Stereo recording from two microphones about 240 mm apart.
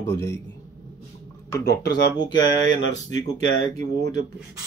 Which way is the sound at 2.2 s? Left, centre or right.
Centre.